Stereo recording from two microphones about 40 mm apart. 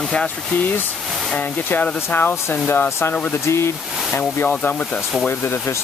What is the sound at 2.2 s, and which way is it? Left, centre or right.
Speech, left.